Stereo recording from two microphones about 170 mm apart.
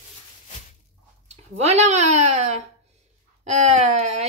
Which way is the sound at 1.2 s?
40° right (ahead or behind).